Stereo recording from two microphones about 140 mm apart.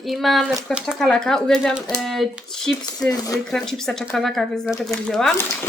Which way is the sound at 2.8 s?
25° left (ahead or behind).